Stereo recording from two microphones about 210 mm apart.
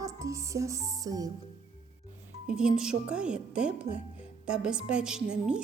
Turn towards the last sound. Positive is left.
turn(degrees=-5)  # may be behind; listen again after turning